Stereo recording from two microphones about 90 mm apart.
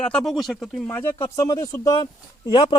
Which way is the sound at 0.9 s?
25° left (ahead or behind).